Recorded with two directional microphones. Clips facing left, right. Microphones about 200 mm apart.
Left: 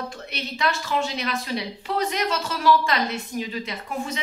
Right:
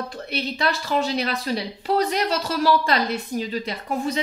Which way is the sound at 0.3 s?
35° right (ahead or behind).